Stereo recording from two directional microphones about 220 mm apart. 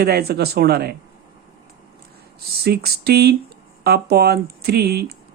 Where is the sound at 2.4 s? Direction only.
45° right (ahead or behind).